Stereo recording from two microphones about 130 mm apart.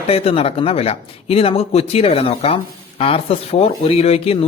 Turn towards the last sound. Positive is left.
turn(degrees=50)  # may be behind; listen again after turning